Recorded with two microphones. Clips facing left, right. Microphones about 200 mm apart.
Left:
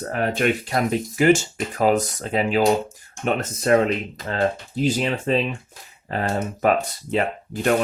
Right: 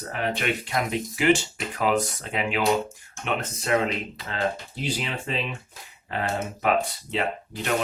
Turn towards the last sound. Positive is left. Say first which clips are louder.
# left 7 dB
turn(degrees=50)  # may be behind; listen again after turning